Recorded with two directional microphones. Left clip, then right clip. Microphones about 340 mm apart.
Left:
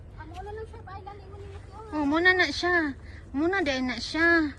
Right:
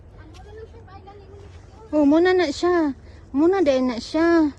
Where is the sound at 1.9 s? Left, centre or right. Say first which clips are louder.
Right 5 dB; right.